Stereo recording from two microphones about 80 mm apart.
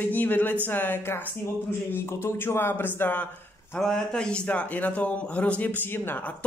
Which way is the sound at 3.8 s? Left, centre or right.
Centre.